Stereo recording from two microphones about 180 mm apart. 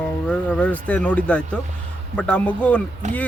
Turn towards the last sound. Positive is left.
turn(degrees=-40)  # may be behind; listen again after turning